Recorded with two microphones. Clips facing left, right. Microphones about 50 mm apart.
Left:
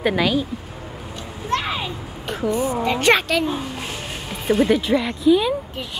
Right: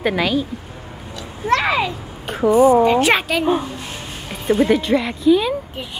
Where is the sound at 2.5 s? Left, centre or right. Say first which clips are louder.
Right 11 dB; centre.